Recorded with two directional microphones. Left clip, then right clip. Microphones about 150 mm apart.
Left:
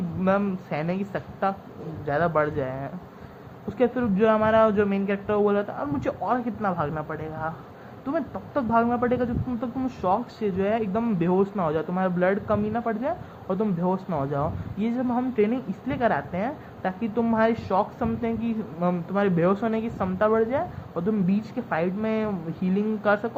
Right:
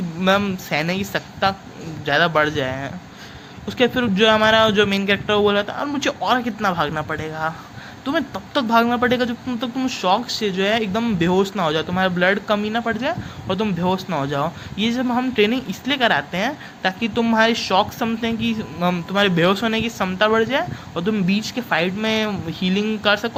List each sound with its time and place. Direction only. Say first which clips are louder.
0.2 s speech: right 6 dB; 30° right (ahead or behind); by 8.8 s 50° right (ahead or behind)
8.8 s speech: right 6 dB; 35° right (ahead or behind)